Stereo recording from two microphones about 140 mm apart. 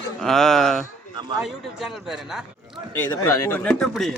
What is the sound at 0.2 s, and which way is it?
Speech, 5° left (ahead or behind).